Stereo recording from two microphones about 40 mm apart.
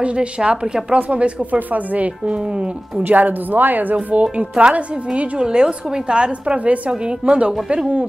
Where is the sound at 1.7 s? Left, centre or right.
Right.